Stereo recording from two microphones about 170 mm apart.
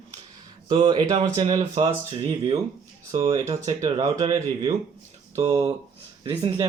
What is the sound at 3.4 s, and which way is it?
Speech, 20° right (ahead or behind).